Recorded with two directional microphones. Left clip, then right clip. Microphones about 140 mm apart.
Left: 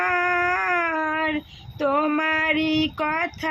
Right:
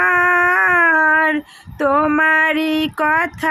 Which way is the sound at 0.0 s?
35° right (ahead or behind).